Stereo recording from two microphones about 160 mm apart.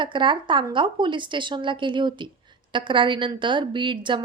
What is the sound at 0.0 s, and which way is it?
A woman's voice, 30° right (ahead or behind).